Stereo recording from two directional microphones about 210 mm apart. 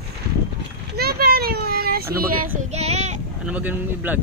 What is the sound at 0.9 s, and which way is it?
Child singing, 45° right (ahead or behind).